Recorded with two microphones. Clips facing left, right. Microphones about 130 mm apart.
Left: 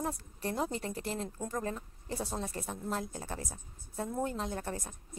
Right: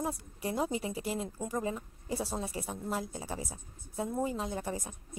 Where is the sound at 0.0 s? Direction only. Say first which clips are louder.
Right 1 dB; 5° right (ahead or behind).